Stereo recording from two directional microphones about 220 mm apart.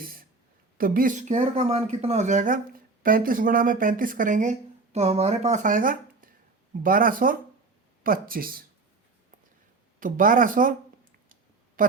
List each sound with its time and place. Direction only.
0.0 s a sound: 40° right (ahead or behind)
0.8 s speech: 40° right (ahead or behind)
10.0 s speech: 40° right (ahead or behind)
11.8 s speech: 40° right (ahead or behind)